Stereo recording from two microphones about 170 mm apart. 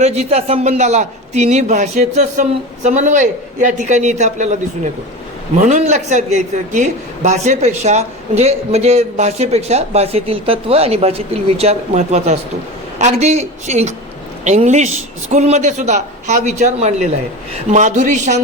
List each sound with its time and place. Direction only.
0.0 s a man's voice: 40° right (ahead or behind)